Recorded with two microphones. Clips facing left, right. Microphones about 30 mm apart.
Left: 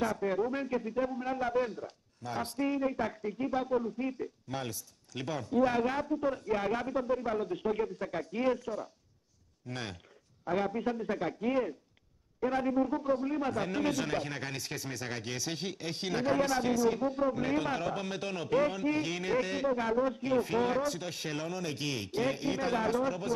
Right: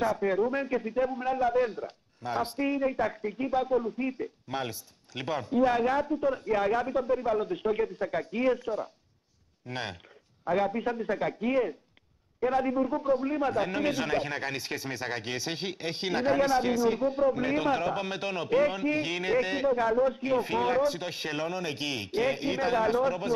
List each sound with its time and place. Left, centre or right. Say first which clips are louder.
0.0 s a man's voice: right 4 dB; right